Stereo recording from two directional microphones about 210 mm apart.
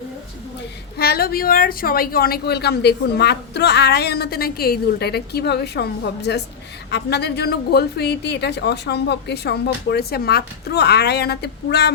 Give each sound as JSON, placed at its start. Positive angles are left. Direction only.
{"t": 0.9, "sound": "a woman's voice", "side_deg": 45}